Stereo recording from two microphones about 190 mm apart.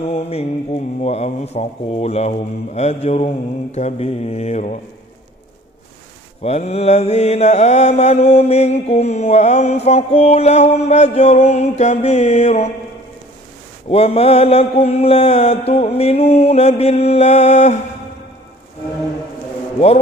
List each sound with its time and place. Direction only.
0.1 s mantra: 35° left (ahead or behind)
6.4 s mantra: 35° left (ahead or behind)
13.9 s mantra: 30° left (ahead or behind)